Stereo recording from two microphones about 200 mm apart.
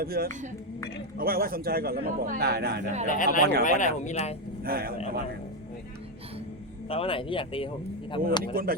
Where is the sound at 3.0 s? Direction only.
40° left (ahead or behind).